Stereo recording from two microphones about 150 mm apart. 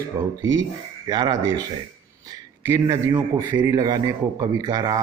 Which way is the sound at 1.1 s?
30° right (ahead or behind).